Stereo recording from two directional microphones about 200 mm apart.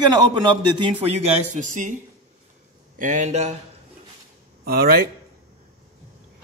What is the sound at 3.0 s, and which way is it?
Speech, 40° right (ahead or behind).